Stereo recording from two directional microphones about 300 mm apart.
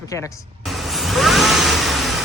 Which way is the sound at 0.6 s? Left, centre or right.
Centre.